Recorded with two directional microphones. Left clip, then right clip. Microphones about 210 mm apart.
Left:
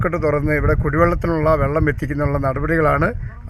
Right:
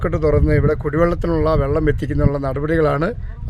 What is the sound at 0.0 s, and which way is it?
Speech, 5° right (ahead or behind).